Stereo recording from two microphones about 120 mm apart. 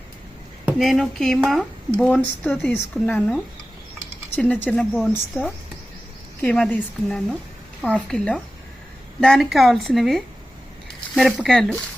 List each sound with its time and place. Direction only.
0.8 s speech: centre (ahead or behind)
2.0 s speech: 15° left (ahead or behind)
4.4 s speech: 10° left (ahead or behind)